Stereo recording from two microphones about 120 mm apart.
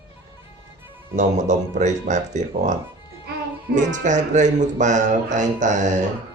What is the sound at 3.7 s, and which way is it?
Speech, 90° right.